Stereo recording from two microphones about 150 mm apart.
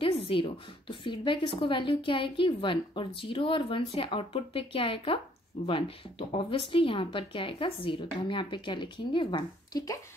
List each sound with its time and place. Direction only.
0.0 s speech: 35° left (ahead or behind)